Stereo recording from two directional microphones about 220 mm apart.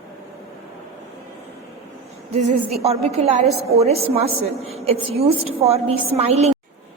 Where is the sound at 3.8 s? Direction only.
30° right (ahead or behind).